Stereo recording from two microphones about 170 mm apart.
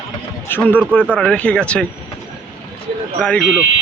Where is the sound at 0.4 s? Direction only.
10° left (ahead or behind).